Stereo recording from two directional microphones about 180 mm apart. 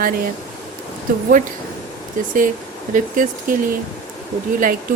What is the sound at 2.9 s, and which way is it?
Speech, 45° right (ahead or behind).